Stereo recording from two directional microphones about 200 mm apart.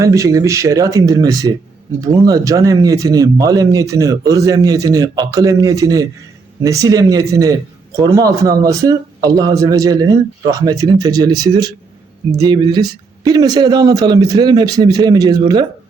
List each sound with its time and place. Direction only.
0.0 s a man's voice: 15° right (ahead or behind)